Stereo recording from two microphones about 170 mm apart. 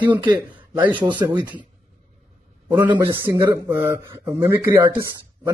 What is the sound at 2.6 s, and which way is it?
A man's voice, 10° right (ahead or behind).